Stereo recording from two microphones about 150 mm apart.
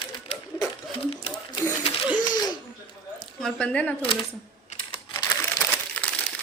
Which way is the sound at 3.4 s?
5° left (ahead or behind).